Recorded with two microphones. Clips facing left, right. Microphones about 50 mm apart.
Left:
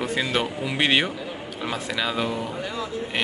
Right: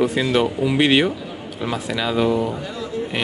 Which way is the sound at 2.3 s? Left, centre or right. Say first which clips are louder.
Right 9 dB; right.